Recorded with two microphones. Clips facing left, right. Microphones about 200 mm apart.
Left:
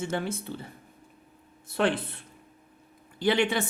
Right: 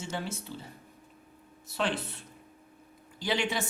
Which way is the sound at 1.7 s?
55° left (ahead or behind).